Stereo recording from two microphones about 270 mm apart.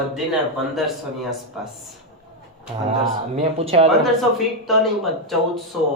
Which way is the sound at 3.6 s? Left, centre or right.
Right.